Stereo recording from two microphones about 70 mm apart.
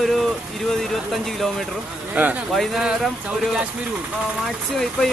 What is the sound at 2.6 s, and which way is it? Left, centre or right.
Speech, centre.